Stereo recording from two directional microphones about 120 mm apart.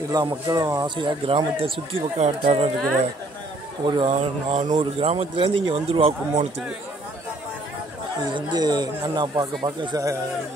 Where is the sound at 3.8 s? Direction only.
40° right (ahead or behind).